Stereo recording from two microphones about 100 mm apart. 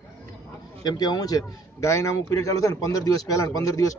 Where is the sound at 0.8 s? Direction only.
40° left (ahead or behind).